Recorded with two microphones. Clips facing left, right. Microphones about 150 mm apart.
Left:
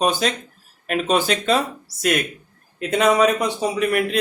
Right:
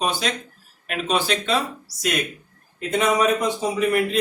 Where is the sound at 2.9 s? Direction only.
70° left (ahead or behind).